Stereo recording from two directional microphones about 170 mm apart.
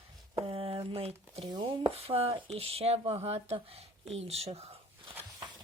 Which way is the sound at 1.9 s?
35° right (ahead or behind).